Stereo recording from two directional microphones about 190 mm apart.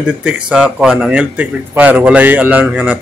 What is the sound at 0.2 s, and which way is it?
Speech, 5° right (ahead or behind).